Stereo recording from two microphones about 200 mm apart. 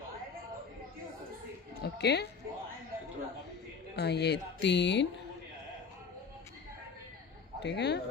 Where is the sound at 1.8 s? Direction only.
55° left (ahead or behind).